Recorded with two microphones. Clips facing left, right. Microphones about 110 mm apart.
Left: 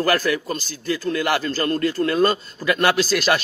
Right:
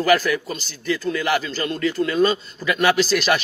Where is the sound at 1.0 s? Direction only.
45° left (ahead or behind).